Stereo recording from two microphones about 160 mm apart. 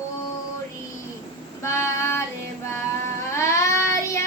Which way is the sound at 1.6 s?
15° left (ahead or behind).